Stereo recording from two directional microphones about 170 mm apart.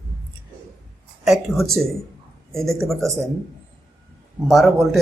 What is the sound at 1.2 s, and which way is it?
A man's voice, centre (ahead or behind).